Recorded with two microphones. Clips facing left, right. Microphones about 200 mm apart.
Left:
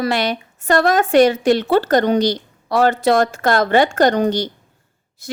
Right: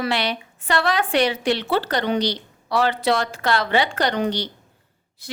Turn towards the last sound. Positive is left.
turn(degrees=45)  # may be behind; listen again after turning